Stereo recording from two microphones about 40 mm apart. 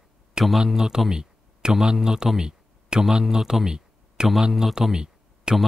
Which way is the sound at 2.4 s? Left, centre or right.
Centre.